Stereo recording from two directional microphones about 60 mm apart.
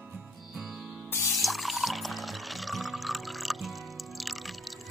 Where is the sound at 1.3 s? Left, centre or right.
Centre.